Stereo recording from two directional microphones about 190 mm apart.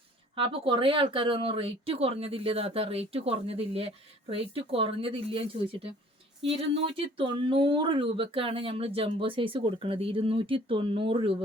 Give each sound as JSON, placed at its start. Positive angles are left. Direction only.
{"t": 0.3, "sound": "speech", "side_deg": -30}